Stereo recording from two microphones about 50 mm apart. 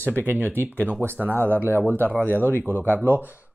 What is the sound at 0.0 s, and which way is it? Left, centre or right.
Speech, left.